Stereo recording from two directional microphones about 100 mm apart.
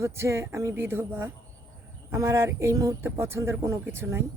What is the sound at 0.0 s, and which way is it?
Speech, 25° right (ahead or behind).